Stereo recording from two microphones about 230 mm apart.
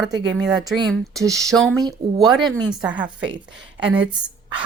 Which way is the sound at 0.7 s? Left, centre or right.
Centre.